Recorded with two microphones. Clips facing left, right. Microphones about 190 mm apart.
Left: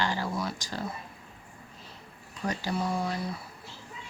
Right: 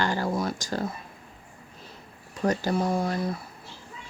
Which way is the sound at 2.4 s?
45° right (ahead or behind).